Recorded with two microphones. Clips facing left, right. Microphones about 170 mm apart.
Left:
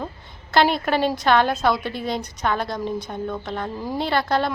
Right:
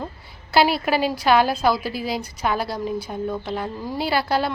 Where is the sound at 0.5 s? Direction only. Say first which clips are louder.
Even; 5° right (ahead or behind).